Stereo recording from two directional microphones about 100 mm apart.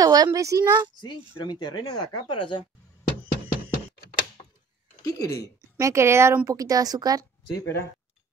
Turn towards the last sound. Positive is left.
turn(degrees=25)  # may be behind; listen again after turning